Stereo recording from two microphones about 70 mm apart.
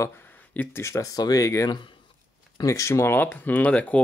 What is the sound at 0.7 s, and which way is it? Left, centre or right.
Speech, left.